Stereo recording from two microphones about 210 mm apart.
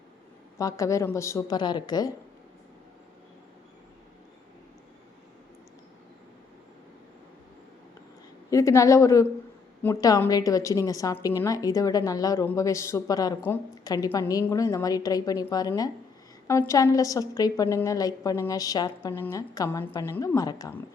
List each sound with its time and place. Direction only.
0.6 s a woman's voice: 15° left (ahead or behind)
8.4 s a woman's voice: 15° left (ahead or behind)